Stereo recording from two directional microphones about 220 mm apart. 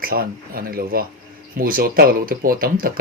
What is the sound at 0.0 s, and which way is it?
Speech, 40° right (ahead or behind).